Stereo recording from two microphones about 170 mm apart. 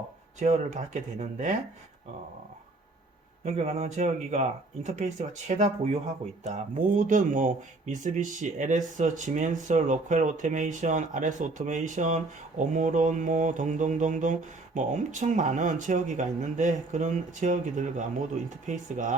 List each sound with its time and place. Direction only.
0.3 s speech: 45° right (ahead or behind)
3.4 s speech: 40° right (ahead or behind)